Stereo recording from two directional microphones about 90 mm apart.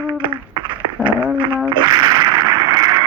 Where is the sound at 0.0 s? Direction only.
60° right (ahead or behind).